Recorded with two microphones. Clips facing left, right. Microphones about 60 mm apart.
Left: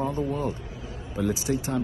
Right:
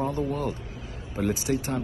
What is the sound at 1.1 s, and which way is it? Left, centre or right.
Speech, right.